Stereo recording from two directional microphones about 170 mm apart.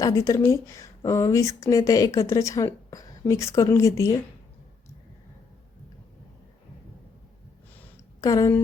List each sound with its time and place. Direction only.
0.0 s a woman's voice: 20° left (ahead or behind)
8.2 s a woman's voice: 20° left (ahead or behind)